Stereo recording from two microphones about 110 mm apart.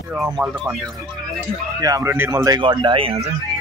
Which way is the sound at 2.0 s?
20° right (ahead or behind).